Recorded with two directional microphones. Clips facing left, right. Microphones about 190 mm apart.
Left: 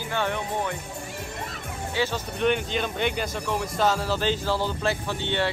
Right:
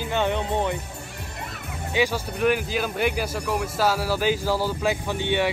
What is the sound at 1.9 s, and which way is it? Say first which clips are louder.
Speech: right 4 dB; 15° right (ahead or behind).